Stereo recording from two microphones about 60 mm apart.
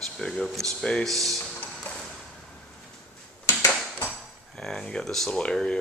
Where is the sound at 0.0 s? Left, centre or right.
Centre.